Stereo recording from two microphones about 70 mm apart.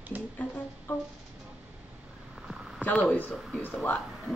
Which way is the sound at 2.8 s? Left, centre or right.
Centre.